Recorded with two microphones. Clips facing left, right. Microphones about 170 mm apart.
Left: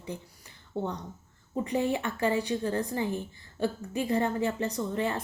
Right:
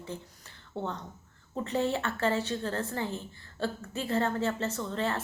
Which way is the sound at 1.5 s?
15° left (ahead or behind).